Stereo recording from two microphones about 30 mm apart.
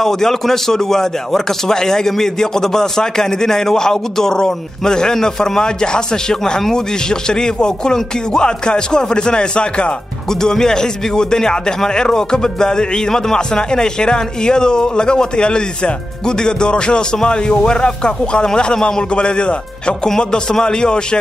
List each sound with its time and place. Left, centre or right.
0.0 s speech: centre; by 9.9 s left
10.4 s speech: centre